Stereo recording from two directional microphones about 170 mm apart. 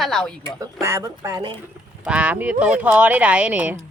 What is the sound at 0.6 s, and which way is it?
Speech, 15° right (ahead or behind).